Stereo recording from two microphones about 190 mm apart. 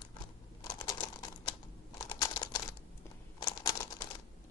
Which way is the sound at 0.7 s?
20° left (ahead or behind).